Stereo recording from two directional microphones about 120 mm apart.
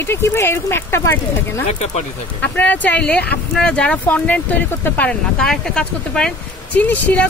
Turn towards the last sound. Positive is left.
turn(degrees=10)  # may be behind; listen again after turning